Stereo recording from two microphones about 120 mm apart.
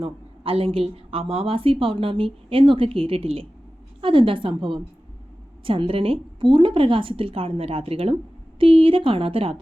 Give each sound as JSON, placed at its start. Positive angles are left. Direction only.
{"t": 0.0, "sound": "a woman's voice", "side_deg": -50}